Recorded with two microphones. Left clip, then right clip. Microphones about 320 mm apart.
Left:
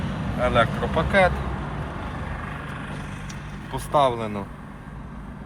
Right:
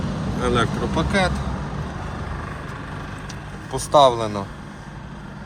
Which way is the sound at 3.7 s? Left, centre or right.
Right.